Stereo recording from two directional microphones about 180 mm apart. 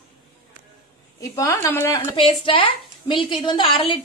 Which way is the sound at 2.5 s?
30° left (ahead or behind).